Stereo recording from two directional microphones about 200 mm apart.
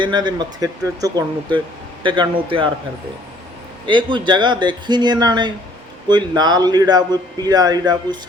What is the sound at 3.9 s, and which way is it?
Speech, 25° right (ahead or behind).